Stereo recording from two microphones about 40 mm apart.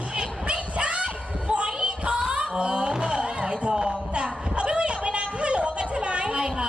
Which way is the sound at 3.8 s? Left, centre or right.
Right.